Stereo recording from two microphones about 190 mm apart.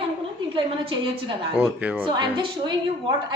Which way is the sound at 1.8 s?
5° right (ahead or behind).